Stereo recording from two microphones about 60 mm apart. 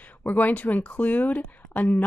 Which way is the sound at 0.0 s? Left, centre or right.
Left.